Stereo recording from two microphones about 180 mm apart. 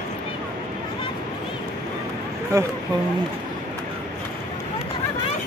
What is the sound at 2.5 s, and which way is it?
Speech, 15° right (ahead or behind).